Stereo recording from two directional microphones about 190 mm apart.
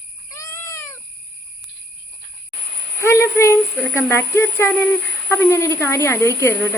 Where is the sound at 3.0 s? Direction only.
15° left (ahead or behind).